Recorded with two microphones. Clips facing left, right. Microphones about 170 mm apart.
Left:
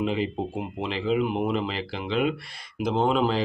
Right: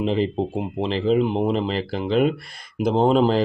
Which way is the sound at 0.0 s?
35° right (ahead or behind).